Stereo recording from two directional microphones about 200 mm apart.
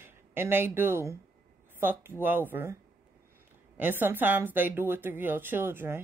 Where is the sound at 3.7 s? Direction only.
10° right (ahead or behind).